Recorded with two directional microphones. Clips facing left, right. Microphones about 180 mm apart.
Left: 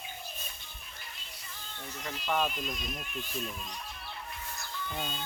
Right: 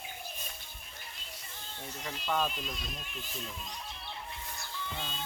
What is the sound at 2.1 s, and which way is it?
Speech, 10° left (ahead or behind).